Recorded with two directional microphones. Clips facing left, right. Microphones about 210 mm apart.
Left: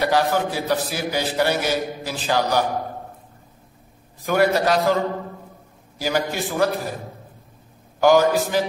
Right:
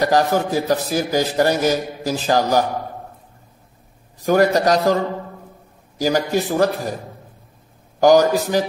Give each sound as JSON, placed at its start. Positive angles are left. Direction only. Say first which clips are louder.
{"t": 0.0, "sound": "a man's voice", "louder": "right 3 dB", "side_deg": -45}
{"t": 4.3, "sound": "a man's voice", "louder": "right 3 dB", "side_deg": -40}
{"t": 5.9, "sound": "a man's voice", "louder": "right 5 dB", "side_deg": -40}
{"t": 8.0, "sound": "a man's voice", "louder": "right 3 dB", "side_deg": -40}